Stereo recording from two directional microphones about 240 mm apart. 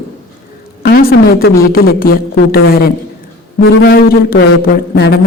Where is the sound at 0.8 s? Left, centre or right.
Left.